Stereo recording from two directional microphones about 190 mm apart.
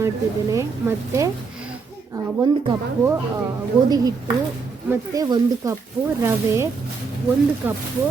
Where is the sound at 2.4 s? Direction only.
25° right (ahead or behind).